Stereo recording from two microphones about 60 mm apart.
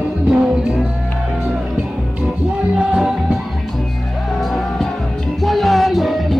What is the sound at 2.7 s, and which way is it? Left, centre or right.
Music, centre.